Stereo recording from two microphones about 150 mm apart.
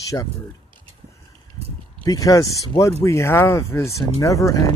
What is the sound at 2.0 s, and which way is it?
Speech, 25° left (ahead or behind).